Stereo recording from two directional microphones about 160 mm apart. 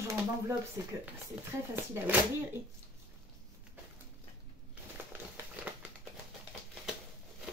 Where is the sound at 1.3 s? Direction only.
5° right (ahead or behind).